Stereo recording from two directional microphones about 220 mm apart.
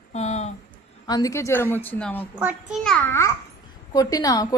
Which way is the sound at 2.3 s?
5° right (ahead or behind).